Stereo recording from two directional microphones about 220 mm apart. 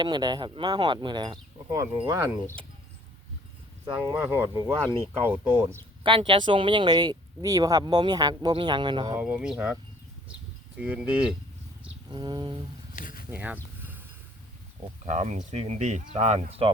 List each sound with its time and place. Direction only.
0.0 s speech: 20° right (ahead or behind)
4.0 s speech: 15° right (ahead or behind)
6.0 s speech: 25° right (ahead or behind)
9.1 s speech: 5° right (ahead or behind)
10.8 s speech: 5° right (ahead or behind)
12.0 s speech: 20° right (ahead or behind)
13.0 s speech: 40° left (ahead or behind)
13.3 s a sound: 10° right (ahead or behind)
15.0 s speech: 35° right (ahead or behind)